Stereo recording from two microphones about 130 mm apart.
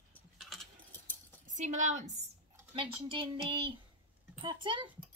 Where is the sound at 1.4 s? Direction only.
70° right (ahead or behind).